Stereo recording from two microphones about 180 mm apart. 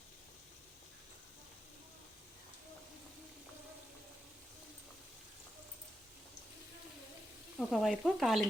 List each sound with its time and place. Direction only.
7.6 s speech: centre (ahead or behind)